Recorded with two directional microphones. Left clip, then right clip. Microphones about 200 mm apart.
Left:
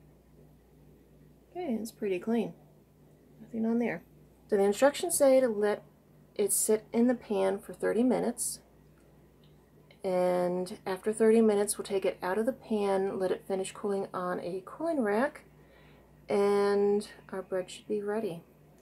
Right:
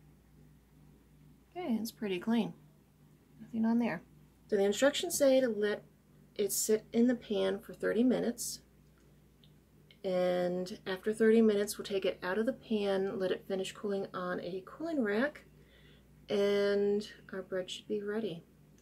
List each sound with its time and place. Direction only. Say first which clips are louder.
1.5 s a woman's voice: left 2 dB; 35° right (ahead or behind)
3.6 s a woman's voice: left 2 dB; 30° right (ahead or behind)
4.5 s speech: left 4 dB; centre (ahead or behind)
10.0 s speech: left 3 dB; centre (ahead or behind)